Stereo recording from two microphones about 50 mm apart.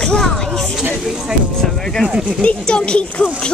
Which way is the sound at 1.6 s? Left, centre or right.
Centre.